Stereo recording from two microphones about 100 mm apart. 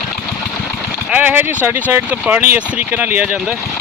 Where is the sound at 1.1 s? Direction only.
15° right (ahead or behind).